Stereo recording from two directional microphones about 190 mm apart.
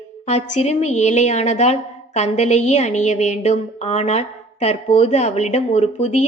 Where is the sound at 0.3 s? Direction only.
35° left (ahead or behind).